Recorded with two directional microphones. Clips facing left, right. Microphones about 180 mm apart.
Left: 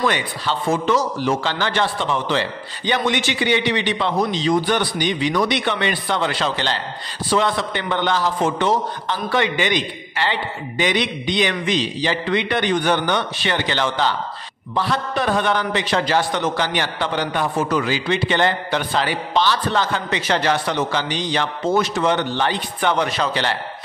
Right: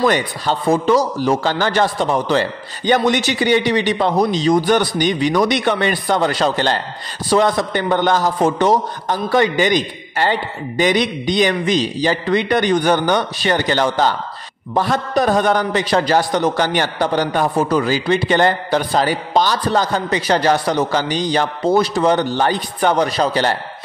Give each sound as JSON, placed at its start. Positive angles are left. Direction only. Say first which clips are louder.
{"t": 0.0, "sound": "a man's voice", "louder": "right 5 dB", "side_deg": -40}